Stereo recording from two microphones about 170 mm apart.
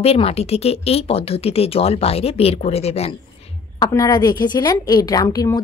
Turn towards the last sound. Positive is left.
turn(degrees=20)  # may be behind; listen again after turning